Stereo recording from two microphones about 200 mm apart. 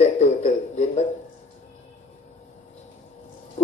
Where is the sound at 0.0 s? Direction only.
35° left (ahead or behind).